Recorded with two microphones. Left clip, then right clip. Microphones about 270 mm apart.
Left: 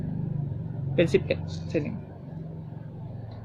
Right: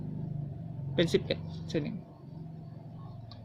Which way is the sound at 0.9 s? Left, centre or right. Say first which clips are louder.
Left 5 dB; centre.